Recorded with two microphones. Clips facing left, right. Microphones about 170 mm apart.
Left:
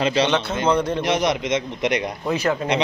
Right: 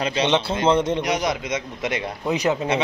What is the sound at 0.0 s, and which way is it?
Speech, 30° left (ahead or behind).